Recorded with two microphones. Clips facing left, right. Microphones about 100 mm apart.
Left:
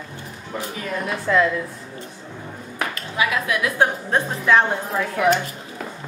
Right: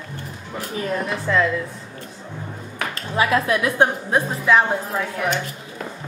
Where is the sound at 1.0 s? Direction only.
5° left (ahead or behind).